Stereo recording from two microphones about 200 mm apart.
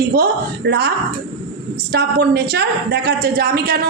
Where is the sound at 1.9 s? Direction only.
50° right (ahead or behind).